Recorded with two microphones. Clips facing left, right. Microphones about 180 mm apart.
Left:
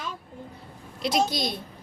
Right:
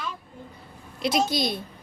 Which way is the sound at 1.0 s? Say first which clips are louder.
Right 1 dB; centre (ahead or behind).